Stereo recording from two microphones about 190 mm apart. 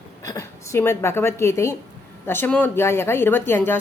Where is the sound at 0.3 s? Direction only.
15° left (ahead or behind).